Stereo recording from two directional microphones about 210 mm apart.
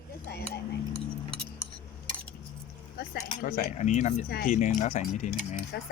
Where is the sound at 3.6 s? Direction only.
35° left (ahead or behind).